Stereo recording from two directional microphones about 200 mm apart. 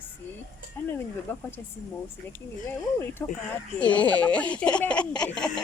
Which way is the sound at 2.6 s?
10° left (ahead or behind).